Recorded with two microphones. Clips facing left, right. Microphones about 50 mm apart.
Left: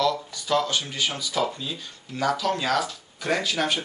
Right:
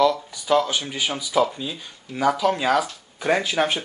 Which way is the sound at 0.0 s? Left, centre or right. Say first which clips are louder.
Right 5 dB; centre.